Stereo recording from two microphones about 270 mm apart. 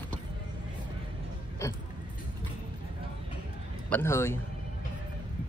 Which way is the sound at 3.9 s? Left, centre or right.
Centre.